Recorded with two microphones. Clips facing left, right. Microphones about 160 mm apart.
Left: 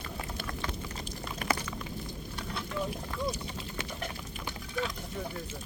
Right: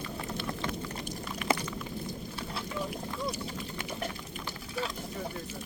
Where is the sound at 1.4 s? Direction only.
40° left (ahead or behind).